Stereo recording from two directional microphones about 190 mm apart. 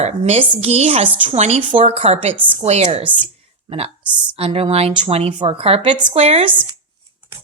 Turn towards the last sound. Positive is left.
turn(degrees=-30)  # may be behind; listen again after turning